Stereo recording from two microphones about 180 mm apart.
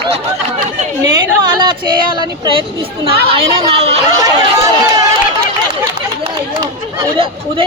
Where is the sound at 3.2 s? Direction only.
35° right (ahead or behind).